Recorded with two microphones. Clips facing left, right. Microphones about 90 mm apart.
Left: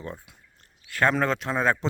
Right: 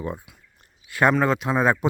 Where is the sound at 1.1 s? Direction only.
5° right (ahead or behind).